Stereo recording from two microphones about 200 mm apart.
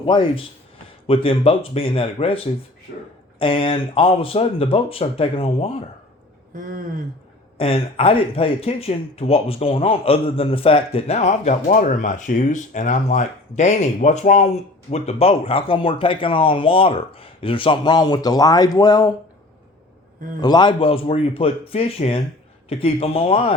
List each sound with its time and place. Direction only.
0.0 s speech: 25° left (ahead or behind)
6.5 s speech: 45° right (ahead or behind)
7.6 s speech: 30° left (ahead or behind)
20.4 s speech: 20° left (ahead or behind)